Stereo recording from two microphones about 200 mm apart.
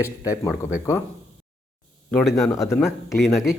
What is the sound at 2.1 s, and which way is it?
Speech, 5° left (ahead or behind).